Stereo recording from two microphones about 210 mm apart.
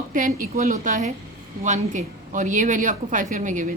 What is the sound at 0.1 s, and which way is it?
A woman's voice, 40° right (ahead or behind).